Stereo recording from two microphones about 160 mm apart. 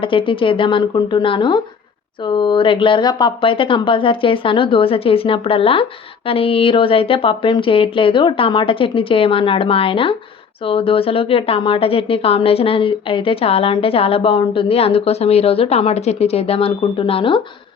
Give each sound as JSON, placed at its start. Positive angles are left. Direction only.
{"t": 0.0, "sound": "a woman's voice", "side_deg": 35}